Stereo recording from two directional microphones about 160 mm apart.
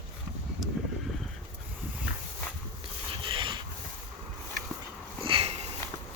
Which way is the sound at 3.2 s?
30° right (ahead or behind).